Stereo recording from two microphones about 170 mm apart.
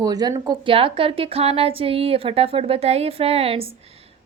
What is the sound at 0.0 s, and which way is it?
A woman's voice, 20° right (ahead or behind).